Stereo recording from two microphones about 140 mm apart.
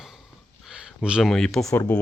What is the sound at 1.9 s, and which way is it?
Speech, 15° left (ahead or behind).